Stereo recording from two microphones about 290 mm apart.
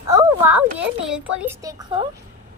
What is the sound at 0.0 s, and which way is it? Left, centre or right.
Speech, centre.